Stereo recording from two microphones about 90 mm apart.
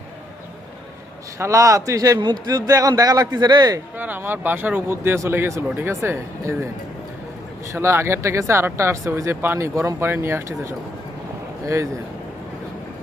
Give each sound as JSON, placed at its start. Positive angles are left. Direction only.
{"t": 1.4, "sound": "speech", "side_deg": -35}
{"t": 2.2, "sound": "speech", "side_deg": -50}
{"t": 3.9, "sound": "speech", "side_deg": -20}
{"t": 7.7, "sound": "speech", "side_deg": -30}